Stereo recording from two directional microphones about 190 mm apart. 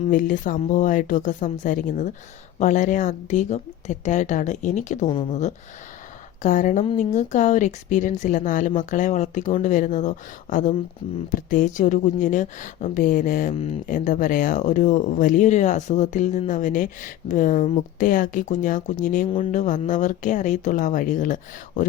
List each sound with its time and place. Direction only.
0.0 s a woman's voice: 45° left (ahead or behind)